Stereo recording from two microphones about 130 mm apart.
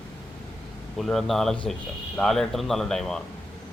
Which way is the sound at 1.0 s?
Centre (ahead or behind).